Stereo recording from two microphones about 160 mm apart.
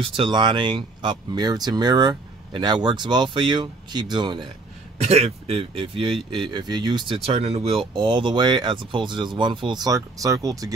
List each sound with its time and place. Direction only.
0.0 s speech: 30° right (ahead or behind)
5.0 s speech: 40° right (ahead or behind); by 10.7 s 20° right (ahead or behind)